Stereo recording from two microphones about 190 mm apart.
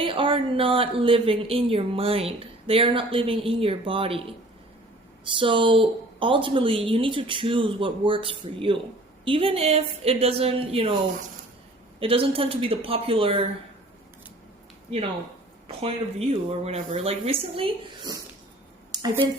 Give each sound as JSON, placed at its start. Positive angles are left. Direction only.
{"t": 0.0, "sound": "a woman's voice", "side_deg": -25}
{"t": 11.9, "sound": "a woman's voice", "side_deg": -30}
{"t": 15.6, "sound": "speech", "side_deg": -30}
{"t": 18.9, "sound": "a sound", "side_deg": -20}